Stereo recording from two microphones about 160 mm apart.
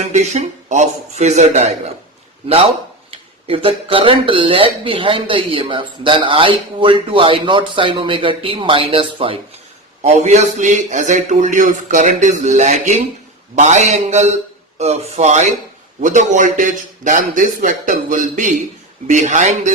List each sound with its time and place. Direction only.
0.0 s a man's voice: 45° right (ahead or behind)
10.0 s a man's voice: 45° right (ahead or behind)